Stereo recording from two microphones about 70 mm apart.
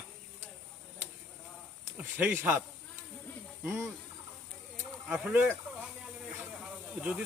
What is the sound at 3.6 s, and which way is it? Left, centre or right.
Speech, right.